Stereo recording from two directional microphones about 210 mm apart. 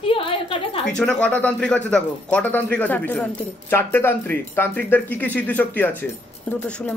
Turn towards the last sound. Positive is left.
turn(degrees=5)  # may be behind; listen again after turning